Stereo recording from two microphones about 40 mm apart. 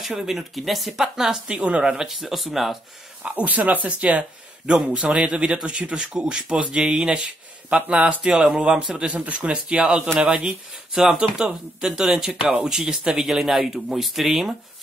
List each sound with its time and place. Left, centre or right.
0.1 s speech: centre
1.5 s speech: right
2.0 s speech: centre
3.3 s speech: right
4.6 s speech: right
7.7 s speech: right
8.2 s speech: centre
9.1 s speech: right
9.4 s speech: right; by 14.5 s centre